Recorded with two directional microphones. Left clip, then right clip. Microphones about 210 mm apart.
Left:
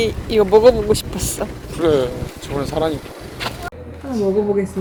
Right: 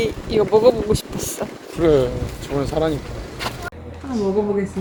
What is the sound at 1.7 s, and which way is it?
Speech, 45° right (ahead or behind).